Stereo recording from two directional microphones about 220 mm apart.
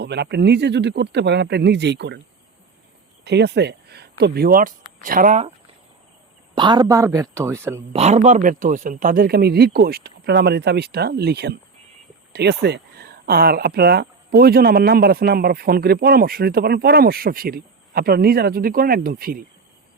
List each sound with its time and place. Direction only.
0.0 s speech: 50° right (ahead or behind)
3.2 s speech: 50° right (ahead or behind)
6.5 s speech: 20° right (ahead or behind)
7.9 s speech: 30° right (ahead or behind)